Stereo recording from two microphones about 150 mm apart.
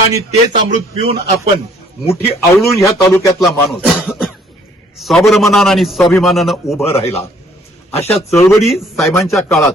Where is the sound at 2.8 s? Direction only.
15° left (ahead or behind).